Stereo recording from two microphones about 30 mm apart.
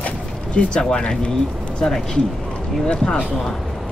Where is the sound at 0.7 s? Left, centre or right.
Left.